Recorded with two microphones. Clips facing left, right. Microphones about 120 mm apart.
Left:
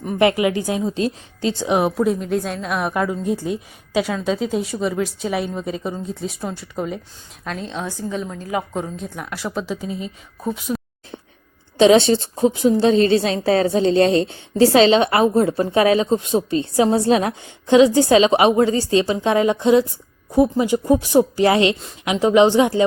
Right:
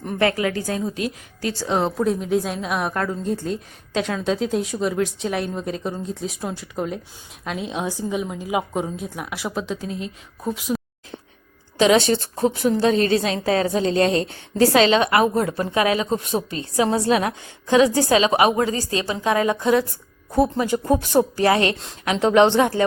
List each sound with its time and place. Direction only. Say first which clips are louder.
0.2 s speech: left 4 dB; 15° left (ahead or behind)
0.9 s a woman's voice: left 5 dB; 25° left (ahead or behind)
2.0 s a woman's voice: left 1 dB; centre (ahead or behind)
11.8 s a woman's voice: left 4 dB; 30° left (ahead or behind); by 22.7 s 10° left (ahead or behind)